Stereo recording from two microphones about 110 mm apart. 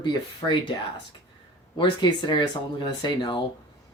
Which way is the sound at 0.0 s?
45° left (ahead or behind).